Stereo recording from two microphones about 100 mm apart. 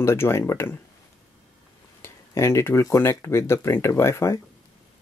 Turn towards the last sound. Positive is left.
turn(degrees=25)  # may be behind; listen again after turning